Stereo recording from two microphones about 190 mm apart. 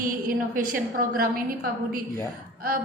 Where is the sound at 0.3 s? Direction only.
50° right (ahead or behind).